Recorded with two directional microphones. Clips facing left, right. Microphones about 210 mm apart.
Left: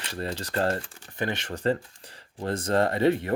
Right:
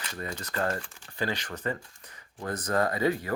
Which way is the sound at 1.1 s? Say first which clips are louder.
Left 2 dB; 20° left (ahead or behind).